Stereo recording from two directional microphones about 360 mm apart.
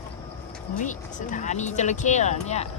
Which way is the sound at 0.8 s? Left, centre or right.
Left.